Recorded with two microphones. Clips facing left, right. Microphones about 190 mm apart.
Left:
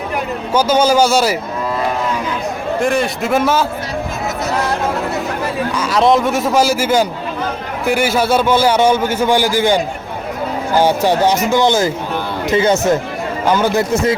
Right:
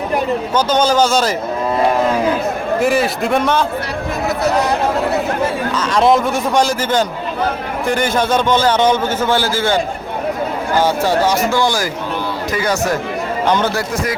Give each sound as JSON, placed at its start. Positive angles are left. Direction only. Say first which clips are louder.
{"t": 0.5, "sound": "a man's voice", "louder": "left 3 dB", "side_deg": 10}
{"t": 2.8, "sound": "a man's voice", "louder": "right 1 dB", "side_deg": -5}
{"t": 5.7, "sound": "a man's voice", "louder": "left 1 dB", "side_deg": 10}
{"t": 13.5, "sound": "a man's voice", "louder": "left 2 dB", "side_deg": 10}
{"t": 13.7, "sound": "speech", "louder": "left 5 dB", "side_deg": 25}